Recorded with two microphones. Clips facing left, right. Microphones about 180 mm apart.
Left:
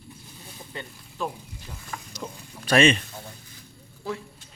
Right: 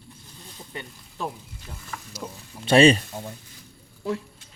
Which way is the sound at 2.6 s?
25° right (ahead or behind).